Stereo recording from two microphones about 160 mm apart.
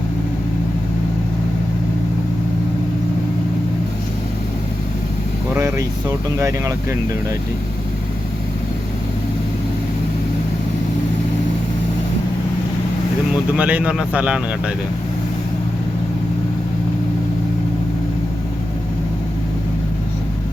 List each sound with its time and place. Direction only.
5.5 s speech: 20° right (ahead or behind)
13.6 s speech: 10° right (ahead or behind)